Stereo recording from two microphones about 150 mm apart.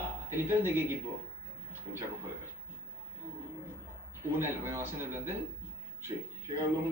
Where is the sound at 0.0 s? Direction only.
15° right (ahead or behind).